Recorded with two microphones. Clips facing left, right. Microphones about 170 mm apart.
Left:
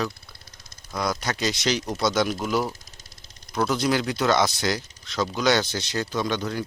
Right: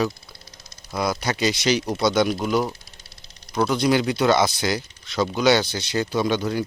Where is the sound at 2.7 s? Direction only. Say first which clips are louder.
Right 2 dB; 45° left (ahead or behind).